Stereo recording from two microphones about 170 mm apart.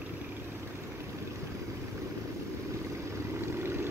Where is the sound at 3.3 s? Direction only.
15° right (ahead or behind).